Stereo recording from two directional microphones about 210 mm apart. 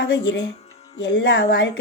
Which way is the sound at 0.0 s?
60° left (ahead or behind).